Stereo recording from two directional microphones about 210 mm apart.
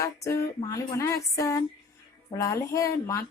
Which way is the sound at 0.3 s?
15° left (ahead or behind).